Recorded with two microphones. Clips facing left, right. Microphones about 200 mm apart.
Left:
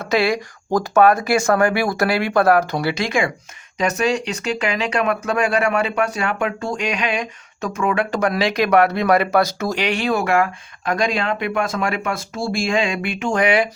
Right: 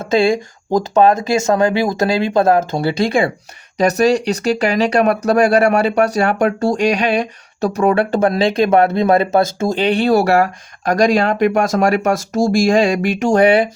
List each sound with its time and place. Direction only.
0.0 s speech: 25° right (ahead or behind)